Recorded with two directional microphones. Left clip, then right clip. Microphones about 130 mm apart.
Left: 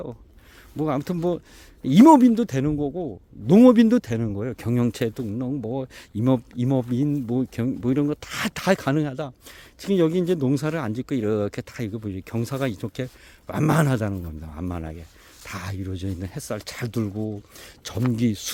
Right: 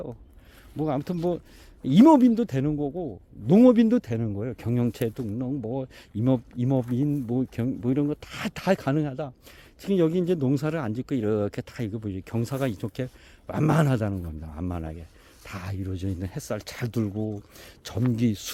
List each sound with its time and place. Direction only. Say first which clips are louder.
0.8 s a man's voice: left 3 dB; 35° left (ahead or behind)